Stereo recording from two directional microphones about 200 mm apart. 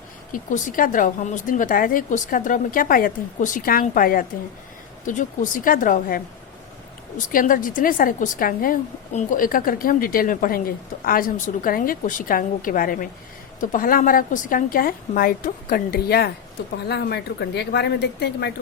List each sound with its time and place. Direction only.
0.3 s a woman's voice: 40° left (ahead or behind)